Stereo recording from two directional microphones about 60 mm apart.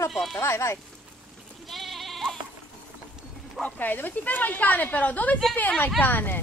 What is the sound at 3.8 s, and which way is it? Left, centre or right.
Speech, left.